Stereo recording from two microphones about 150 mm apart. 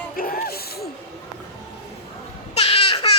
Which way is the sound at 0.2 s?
75° left (ahead or behind).